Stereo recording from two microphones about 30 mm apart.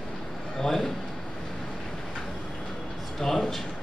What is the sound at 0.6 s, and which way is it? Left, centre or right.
Speech, centre.